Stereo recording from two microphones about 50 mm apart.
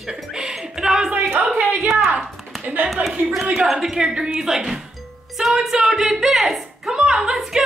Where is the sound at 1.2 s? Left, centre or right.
Right.